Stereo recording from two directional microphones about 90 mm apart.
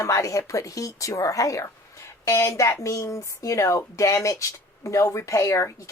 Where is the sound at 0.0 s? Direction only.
35° left (ahead or behind).